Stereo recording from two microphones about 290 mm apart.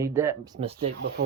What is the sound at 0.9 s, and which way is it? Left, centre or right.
Speech, right.